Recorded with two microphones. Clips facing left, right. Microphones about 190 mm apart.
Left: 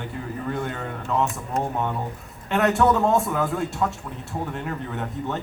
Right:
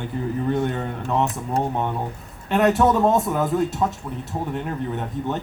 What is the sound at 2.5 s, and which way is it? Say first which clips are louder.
A man's voice: right 2 dB; 20° right (ahead or behind).